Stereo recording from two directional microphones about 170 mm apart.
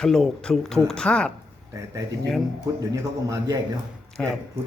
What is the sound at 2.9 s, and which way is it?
Speech, 20° right (ahead or behind).